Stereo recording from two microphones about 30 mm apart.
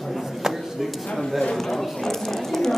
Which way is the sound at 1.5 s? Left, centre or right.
Centre.